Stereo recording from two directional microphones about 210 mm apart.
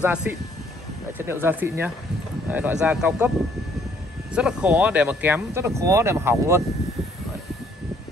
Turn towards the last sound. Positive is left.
turn(degrees=0)  # may be behind; listen again after turning